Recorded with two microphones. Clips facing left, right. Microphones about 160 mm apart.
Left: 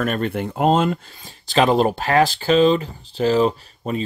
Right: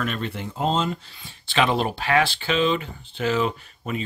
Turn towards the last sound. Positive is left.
turn(degrees=35)  # may be behind; listen again after turning